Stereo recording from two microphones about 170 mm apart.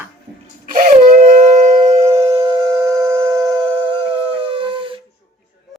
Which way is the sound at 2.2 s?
35° right (ahead or behind).